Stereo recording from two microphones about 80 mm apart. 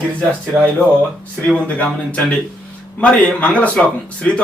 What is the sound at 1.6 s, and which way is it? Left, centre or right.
A man's voice, centre.